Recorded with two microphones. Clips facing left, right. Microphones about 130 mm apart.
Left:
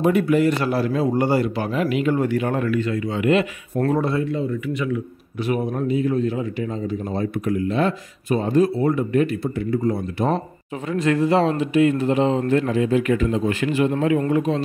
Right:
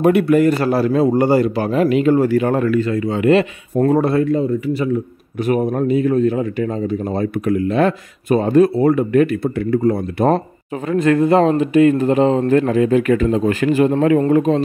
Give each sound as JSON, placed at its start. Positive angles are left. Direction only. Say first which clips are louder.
{"t": 0.0, "sound": "a man's voice", "louder": "right 5 dB", "side_deg": -70}
{"t": 0.3, "sound": "a man's voice", "louder": "right 5 dB", "side_deg": -45}
{"t": 4.0, "sound": "a man's voice", "louder": "right 6 dB", "side_deg": -60}
{"t": 4.4, "sound": "a man's voice", "louder": "right 6 dB", "side_deg": -35}